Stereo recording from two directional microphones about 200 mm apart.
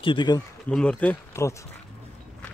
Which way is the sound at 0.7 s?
5° left (ahead or behind).